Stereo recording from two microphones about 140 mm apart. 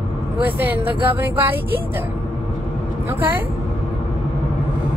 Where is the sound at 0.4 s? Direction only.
15° right (ahead or behind).